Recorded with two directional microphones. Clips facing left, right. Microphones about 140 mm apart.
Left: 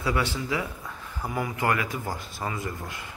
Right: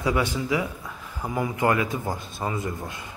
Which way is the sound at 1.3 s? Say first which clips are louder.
Right 4 dB; 20° right (ahead or behind).